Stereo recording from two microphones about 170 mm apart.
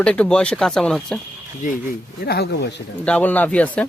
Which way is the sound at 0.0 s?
5° left (ahead or behind).